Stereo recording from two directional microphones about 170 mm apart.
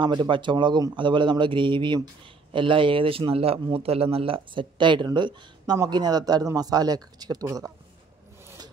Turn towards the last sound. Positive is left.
turn(degrees=-20)  # may be behind; listen again after turning